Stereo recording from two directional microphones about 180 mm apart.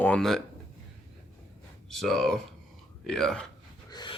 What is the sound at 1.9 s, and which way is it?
Speech, centre (ahead or behind).